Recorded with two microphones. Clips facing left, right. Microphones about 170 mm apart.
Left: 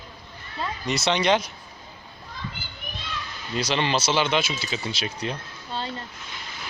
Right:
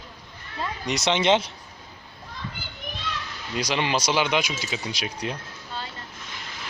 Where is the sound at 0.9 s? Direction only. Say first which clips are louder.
Right 1 dB; 20° right (ahead or behind).